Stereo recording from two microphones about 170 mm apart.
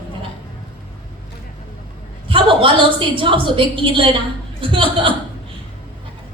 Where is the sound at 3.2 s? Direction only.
30° right (ahead or behind).